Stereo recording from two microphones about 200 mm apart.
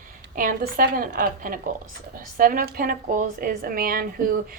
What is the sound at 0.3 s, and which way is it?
A woman's voice, 45° right (ahead or behind).